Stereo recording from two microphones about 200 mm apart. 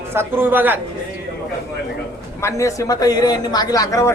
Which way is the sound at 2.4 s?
15° left (ahead or behind).